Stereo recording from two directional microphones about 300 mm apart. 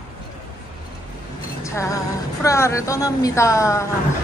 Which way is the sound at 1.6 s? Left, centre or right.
Centre.